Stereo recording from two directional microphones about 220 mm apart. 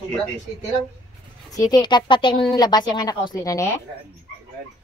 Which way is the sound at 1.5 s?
15° left (ahead or behind).